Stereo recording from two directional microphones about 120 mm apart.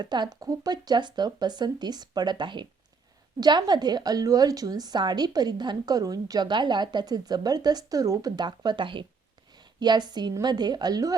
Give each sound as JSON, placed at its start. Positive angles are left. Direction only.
{"t": 0.0, "sound": "a woman's voice", "side_deg": -35}